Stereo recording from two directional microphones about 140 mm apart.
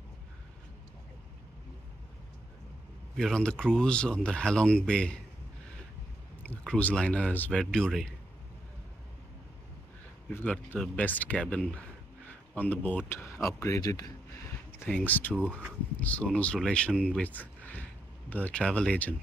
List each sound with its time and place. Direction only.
3.2 s speech: 5° left (ahead or behind)
6.4 s speech: 10° left (ahead or behind)
10.3 s speech: 10° left (ahead or behind); by 14.1 s 25° left (ahead or behind)
14.9 s speech: 10° left (ahead or behind)